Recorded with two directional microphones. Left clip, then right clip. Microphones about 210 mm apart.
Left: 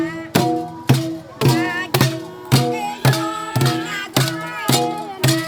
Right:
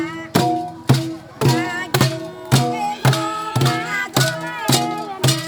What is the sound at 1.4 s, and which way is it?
Music, 10° left (ahead or behind).